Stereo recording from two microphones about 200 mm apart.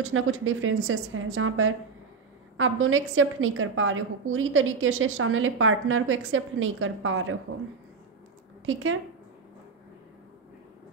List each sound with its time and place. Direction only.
0.0 s a woman's voice: 85° right